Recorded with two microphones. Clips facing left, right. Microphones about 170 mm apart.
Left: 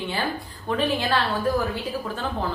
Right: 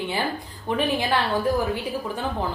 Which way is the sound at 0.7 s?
15° right (ahead or behind).